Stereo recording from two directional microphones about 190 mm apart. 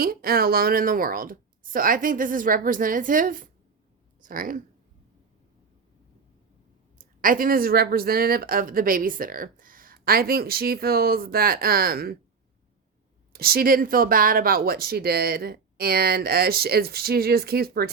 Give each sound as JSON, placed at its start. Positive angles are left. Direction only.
{"t": 0.0, "sound": "speech", "side_deg": -50}
{"t": 7.0, "sound": "speech", "side_deg": -45}
{"t": 13.3, "sound": "speech", "side_deg": -50}